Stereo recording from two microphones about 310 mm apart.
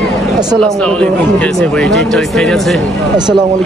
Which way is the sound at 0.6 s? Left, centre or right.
Centre.